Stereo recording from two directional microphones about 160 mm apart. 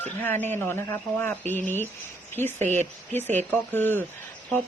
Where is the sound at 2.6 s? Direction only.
45° right (ahead or behind).